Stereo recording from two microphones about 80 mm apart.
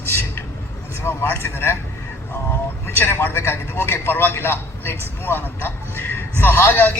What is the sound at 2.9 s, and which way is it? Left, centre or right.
A man's voice, left.